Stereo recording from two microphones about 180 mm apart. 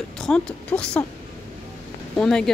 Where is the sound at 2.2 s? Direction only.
5° left (ahead or behind).